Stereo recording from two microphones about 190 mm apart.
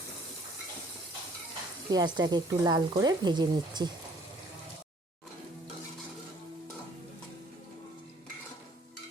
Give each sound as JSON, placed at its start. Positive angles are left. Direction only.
{"t": 1.9, "sound": "speech", "side_deg": -20}